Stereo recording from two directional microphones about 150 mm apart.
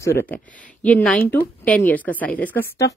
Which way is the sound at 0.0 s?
15° left (ahead or behind).